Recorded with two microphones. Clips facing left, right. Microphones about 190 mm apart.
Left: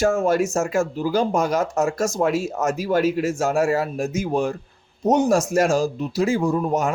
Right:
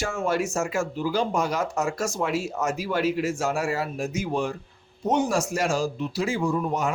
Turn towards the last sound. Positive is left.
turn(degrees=45)  # may be behind; listen again after turning